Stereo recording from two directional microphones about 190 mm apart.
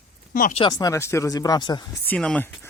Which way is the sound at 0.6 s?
20° left (ahead or behind).